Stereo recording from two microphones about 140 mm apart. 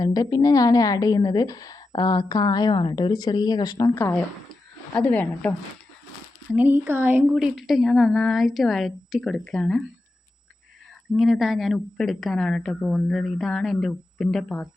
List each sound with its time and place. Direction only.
0.0 s a woman's voice: 25° left (ahead or behind)
3.9 s a woman's voice: 15° left (ahead or behind)
6.5 s a woman's voice: 10° right (ahead or behind)
11.1 s a woman's voice: 5° right (ahead or behind)